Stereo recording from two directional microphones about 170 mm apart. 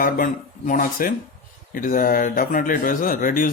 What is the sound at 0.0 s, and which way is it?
Speech, 50° left (ahead or behind).